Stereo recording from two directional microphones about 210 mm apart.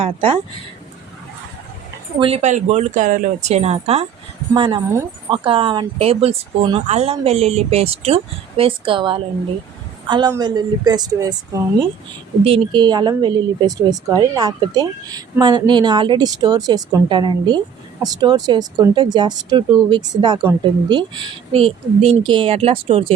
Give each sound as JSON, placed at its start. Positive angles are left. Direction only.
{"t": 0.0, "sound": "speech", "side_deg": -25}
{"t": 2.1, "sound": "a woman's voice", "side_deg": -25}